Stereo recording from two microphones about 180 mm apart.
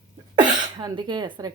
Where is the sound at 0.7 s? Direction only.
25° right (ahead or behind).